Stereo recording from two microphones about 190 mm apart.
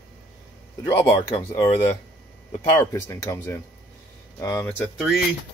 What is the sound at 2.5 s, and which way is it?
Speech, 15° left (ahead or behind).